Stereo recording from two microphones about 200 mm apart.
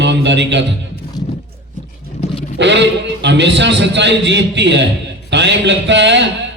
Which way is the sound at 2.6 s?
60° right (ahead or behind).